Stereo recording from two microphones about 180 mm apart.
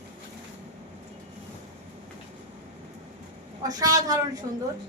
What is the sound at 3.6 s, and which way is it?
Speech, 20° right (ahead or behind).